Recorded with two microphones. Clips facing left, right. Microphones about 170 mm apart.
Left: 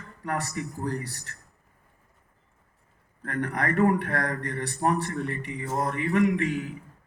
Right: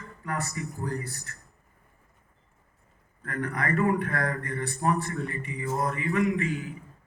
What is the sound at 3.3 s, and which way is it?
A man's voice, 70° left (ahead or behind).